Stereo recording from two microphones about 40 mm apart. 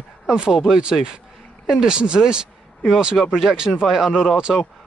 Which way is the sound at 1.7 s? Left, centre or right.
Centre.